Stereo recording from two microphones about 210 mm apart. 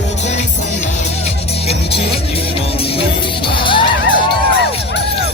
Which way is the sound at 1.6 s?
30° left (ahead or behind).